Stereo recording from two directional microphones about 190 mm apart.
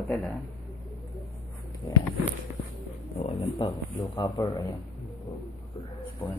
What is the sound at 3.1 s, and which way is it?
Speech, 25° left (ahead or behind).